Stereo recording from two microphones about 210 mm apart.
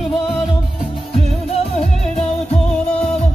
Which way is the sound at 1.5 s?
30° left (ahead or behind).